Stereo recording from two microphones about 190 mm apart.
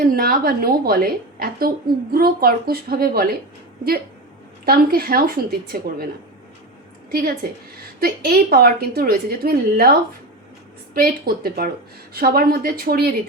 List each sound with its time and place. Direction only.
0.0 s a woman's voice: 50° right (ahead or behind)
4.6 s a woman's voice: 50° right (ahead or behind)
7.1 s a woman's voice: 50° right (ahead or behind)
10.9 s a woman's voice: 50° right (ahead or behind)